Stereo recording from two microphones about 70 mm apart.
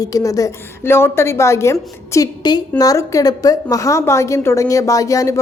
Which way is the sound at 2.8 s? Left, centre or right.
Left.